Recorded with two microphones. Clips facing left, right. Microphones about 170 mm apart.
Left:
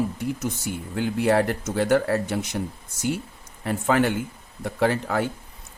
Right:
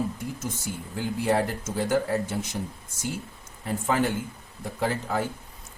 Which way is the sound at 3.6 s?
70° left (ahead or behind).